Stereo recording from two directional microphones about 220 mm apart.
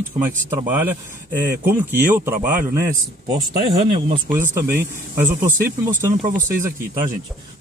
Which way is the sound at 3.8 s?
25° right (ahead or behind).